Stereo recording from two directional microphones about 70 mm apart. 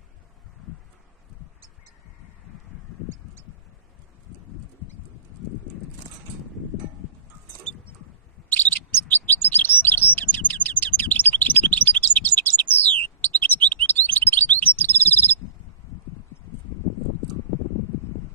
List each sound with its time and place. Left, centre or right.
8.5 s chirp: left